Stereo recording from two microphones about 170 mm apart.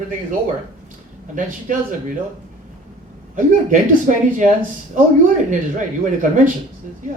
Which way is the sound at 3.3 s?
50° right (ahead or behind).